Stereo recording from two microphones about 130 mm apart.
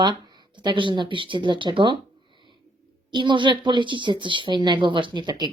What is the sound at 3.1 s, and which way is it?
Speech, 35° right (ahead or behind).